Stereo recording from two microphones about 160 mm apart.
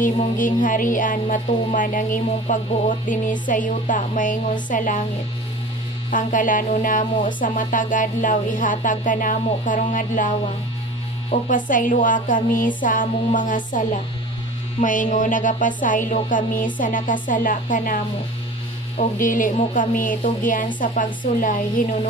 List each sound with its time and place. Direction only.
0.0 s music: 55° left (ahead or behind)
6.0 s music: 55° left (ahead or behind)